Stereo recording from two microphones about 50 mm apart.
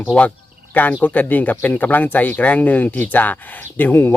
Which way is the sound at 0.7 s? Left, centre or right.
Left.